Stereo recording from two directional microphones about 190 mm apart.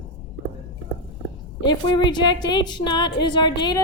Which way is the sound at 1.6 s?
25° left (ahead or behind).